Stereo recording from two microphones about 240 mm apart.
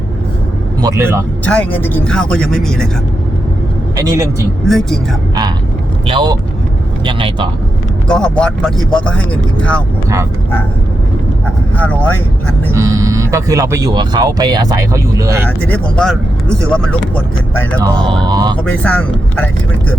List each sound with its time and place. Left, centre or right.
0.8 s speech: centre
1.5 s speech: centre
3.9 s speech: centre
4.6 s speech: centre
6.1 s speech: right
8.0 s speech: centre
11.8 s speech: centre
12.7 s speech: centre
15.4 s speech: centre
18.1 s speech: centre
18.5 s speech: centre